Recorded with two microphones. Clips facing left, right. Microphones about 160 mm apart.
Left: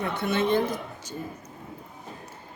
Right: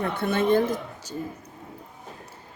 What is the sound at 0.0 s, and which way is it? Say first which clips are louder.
Speech: right 2 dB; 50° right (ahead or behind).